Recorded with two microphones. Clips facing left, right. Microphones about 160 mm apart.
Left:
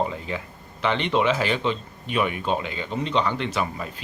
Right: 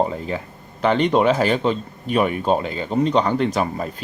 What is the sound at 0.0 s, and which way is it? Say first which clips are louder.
Speech: right 5 dB; 40° right (ahead or behind).